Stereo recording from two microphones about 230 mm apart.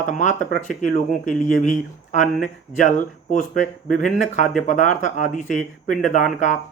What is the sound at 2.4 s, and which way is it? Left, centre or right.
Speech, left.